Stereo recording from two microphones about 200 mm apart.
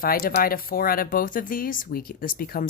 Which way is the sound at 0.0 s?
45° left (ahead or behind).